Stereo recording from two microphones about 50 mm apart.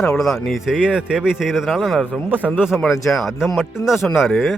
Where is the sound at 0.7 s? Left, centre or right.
Centre.